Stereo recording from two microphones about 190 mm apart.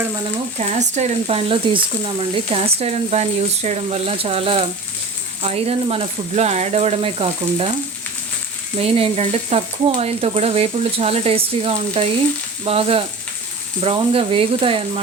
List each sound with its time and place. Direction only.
0.6 s speech: 35° right (ahead or behind)
8.8 s speech: 30° right (ahead or behind)